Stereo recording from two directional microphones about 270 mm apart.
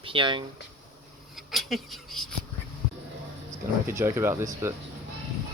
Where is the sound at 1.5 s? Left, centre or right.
Centre.